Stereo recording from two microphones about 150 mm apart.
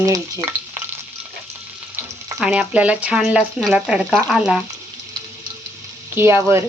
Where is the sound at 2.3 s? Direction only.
5° right (ahead or behind).